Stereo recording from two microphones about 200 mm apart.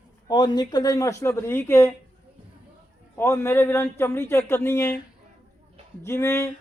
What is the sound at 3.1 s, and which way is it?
Speech, 15° left (ahead or behind).